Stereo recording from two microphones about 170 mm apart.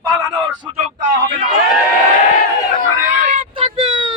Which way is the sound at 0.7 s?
40° right (ahead or behind).